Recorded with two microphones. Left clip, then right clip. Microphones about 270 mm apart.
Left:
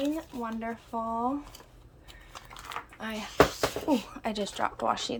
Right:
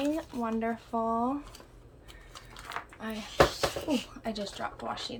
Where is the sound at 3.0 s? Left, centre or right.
Centre.